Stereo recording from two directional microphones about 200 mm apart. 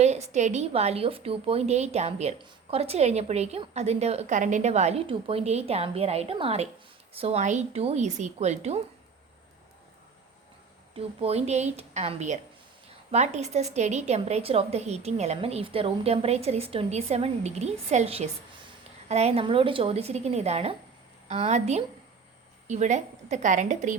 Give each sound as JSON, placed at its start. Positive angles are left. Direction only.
{"t": 0.0, "sound": "a woman's voice", "side_deg": -35}
{"t": 10.9, "sound": "a woman's voice", "side_deg": -30}